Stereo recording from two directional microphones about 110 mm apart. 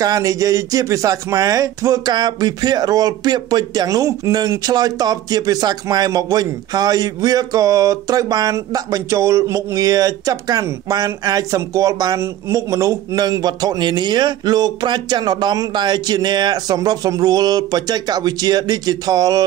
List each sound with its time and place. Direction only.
0.0 s speech: 35° right (ahead or behind)